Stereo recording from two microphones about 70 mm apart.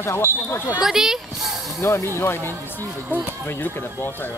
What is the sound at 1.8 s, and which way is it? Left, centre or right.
Speech, left.